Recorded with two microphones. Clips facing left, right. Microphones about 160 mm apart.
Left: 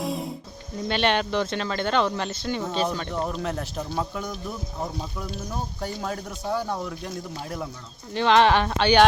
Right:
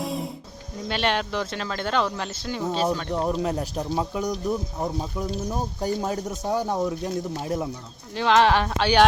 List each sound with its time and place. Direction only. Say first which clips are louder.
0.0 s music: even; centre (ahead or behind)
0.9 s speech: left 2 dB; centre (ahead or behind)
3.2 s speech: right 4 dB; 20° right (ahead or behind)
4.2 s speech: right 7 dB; 40° right (ahead or behind)
5.8 s speech: right 6 dB; 20° right (ahead or behind)
8.1 s speech: left 1 dB; centre (ahead or behind)